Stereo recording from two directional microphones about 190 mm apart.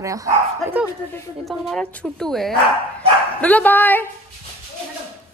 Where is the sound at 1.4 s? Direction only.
Centre (ahead or behind).